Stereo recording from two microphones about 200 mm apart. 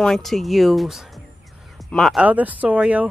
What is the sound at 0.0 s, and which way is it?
Speech, centre (ahead or behind).